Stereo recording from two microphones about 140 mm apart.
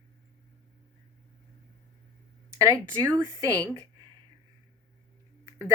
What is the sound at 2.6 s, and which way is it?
Speech, 25° right (ahead or behind).